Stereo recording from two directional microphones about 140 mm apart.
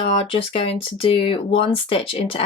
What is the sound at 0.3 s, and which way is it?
Speech, 40° left (ahead or behind).